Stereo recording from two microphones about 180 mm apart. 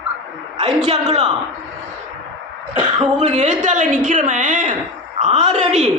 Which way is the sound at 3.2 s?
40° right (ahead or behind).